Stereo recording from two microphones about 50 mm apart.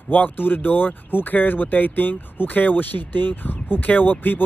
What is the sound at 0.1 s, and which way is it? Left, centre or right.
Speech, left.